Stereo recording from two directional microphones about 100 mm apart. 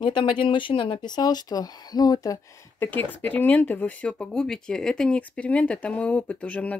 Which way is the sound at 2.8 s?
20° left (ahead or behind).